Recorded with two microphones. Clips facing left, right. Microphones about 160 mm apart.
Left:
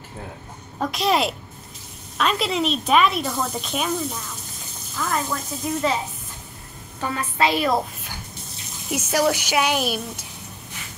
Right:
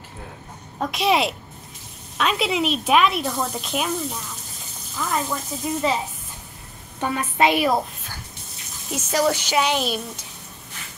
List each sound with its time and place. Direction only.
0.7 s speech: 5° right (ahead or behind)
4.9 s speech: 10° right (ahead or behind)
7.0 s a woman's voice: 20° right (ahead or behind)
8.9 s a woman's voice: 10° left (ahead or behind)